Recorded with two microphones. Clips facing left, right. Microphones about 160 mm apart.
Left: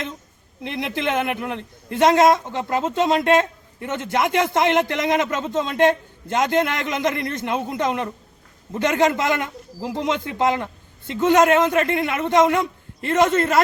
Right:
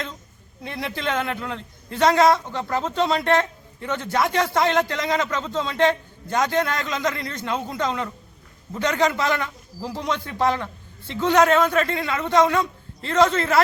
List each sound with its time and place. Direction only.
0.8 s speech: 20° left (ahead or behind)